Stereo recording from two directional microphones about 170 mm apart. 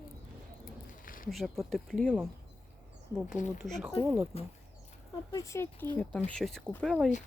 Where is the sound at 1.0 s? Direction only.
55° left (ahead or behind).